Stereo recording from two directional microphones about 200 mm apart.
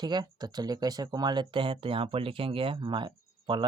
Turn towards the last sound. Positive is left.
turn(degrees=-25)  # may be behind; listen again after turning